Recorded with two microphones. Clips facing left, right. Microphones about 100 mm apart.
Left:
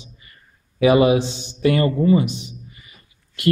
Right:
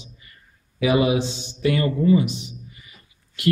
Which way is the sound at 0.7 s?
50° left (ahead or behind).